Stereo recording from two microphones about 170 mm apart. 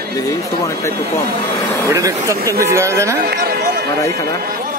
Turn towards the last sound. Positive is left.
turn(degrees=-15)  # may be behind; listen again after turning